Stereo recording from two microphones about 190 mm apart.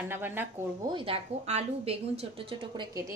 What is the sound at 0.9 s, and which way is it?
A woman's voice, 30° right (ahead or behind).